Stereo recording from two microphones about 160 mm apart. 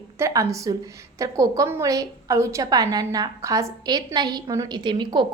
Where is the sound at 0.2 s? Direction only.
20° right (ahead or behind).